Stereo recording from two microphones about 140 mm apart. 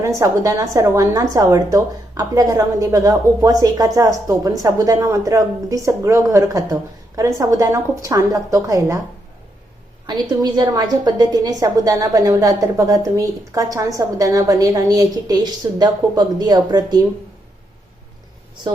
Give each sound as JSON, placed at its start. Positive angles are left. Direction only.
{"t": 0.2, "sound": "a woman's voice", "side_deg": -25}
{"t": 10.1, "sound": "a woman's voice", "side_deg": -30}